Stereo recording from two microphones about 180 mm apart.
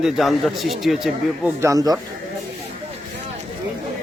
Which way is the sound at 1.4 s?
15° right (ahead or behind).